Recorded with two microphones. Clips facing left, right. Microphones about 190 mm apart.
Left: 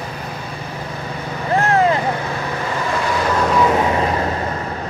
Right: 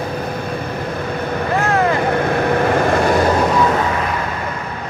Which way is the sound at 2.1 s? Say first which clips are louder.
Right 7 dB; 60° right (ahead or behind).